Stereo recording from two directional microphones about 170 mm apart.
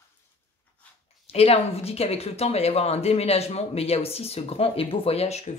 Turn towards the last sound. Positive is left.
turn(degrees=40)  # may be behind; listen again after turning